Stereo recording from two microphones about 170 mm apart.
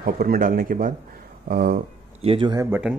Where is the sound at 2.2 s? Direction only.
30° right (ahead or behind).